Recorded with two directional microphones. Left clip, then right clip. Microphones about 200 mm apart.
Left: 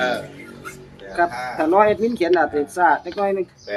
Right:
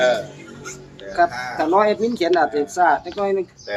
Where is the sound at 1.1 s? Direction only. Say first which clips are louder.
Right 2 dB; 15° left (ahead or behind).